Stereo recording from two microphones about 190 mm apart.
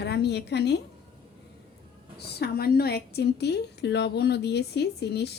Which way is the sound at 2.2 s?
55° left (ahead or behind).